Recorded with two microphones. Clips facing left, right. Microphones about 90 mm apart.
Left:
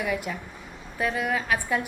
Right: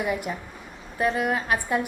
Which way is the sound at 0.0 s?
45° right (ahead or behind).